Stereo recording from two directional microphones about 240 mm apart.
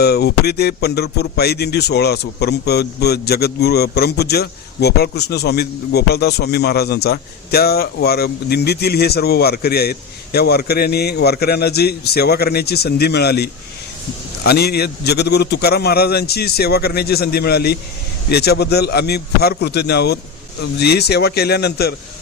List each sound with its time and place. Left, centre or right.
0.0 s a man's voice: left